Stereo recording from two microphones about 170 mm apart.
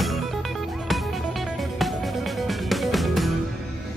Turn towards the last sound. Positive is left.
turn(degrees=0)  # may be behind; listen again after turning